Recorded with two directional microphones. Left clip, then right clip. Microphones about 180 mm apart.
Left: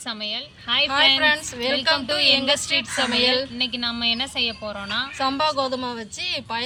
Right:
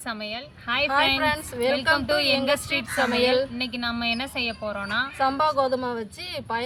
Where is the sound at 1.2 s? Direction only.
20° right (ahead or behind).